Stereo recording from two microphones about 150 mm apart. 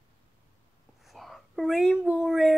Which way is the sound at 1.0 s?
Centre (ahead or behind).